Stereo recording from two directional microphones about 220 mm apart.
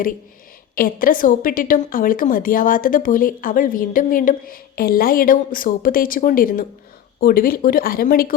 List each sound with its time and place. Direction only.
0.8 s a woman's voice: 40° left (ahead or behind)